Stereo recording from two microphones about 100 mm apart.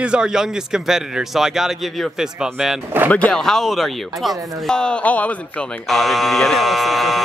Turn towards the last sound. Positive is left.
turn(degrees=0)  # may be behind; listen again after turning